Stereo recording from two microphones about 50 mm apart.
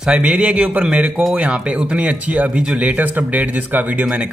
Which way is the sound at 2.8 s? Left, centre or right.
Right.